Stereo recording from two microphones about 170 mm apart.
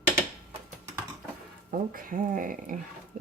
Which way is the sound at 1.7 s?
50° right (ahead or behind).